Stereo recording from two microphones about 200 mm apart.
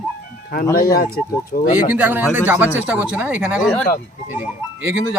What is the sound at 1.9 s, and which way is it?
Speech, 10° right (ahead or behind).